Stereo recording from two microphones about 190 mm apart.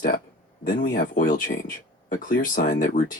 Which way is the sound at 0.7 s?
45° left (ahead or behind).